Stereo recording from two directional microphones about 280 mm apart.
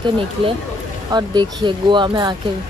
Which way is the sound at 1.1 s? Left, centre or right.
Centre.